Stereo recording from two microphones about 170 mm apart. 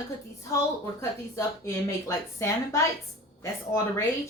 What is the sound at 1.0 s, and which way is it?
A woman's voice, 15° left (ahead or behind).